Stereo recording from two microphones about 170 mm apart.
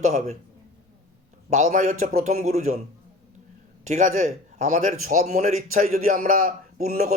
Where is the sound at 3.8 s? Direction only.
45° right (ahead or behind).